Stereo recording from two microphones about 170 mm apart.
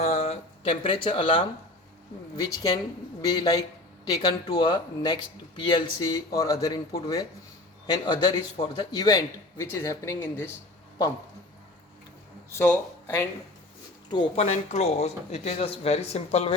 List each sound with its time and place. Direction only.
0.0 s a sound: 40° left (ahead or behind)
2.3 s speech: 20° left (ahead or behind)
12.5 s speech: 15° left (ahead or behind)
14.3 s speech: 40° left (ahead or behind)